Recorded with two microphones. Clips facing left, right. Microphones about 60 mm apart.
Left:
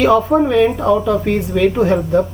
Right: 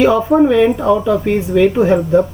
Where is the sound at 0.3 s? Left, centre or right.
Centre.